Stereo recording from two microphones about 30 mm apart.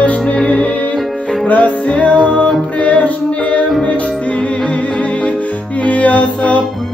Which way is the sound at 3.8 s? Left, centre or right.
Left.